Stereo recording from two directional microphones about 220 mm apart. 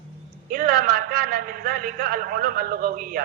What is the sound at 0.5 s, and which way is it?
A man's voice, 40° right (ahead or behind).